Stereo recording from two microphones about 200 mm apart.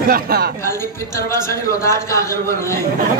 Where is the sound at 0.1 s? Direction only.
50° right (ahead or behind).